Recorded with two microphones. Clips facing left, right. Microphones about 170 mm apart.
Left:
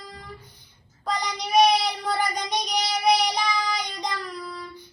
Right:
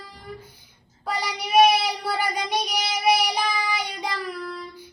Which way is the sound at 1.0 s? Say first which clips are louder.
Even; 5° right (ahead or behind).